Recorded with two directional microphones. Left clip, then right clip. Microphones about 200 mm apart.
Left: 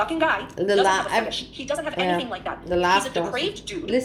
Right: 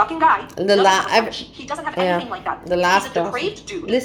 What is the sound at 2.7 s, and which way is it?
Speech, 35° right (ahead or behind).